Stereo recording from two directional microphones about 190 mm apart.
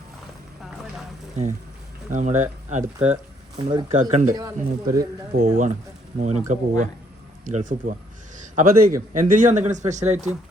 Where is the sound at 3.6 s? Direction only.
25° right (ahead or behind).